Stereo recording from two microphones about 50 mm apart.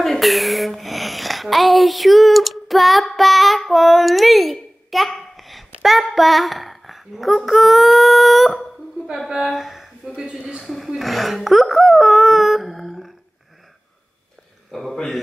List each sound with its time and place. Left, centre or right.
0.0 s speech: centre
14.7 s a man's voice: centre